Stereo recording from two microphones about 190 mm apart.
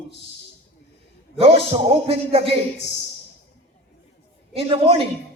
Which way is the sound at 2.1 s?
30° right (ahead or behind).